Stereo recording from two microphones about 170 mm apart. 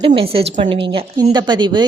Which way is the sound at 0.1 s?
40° right (ahead or behind).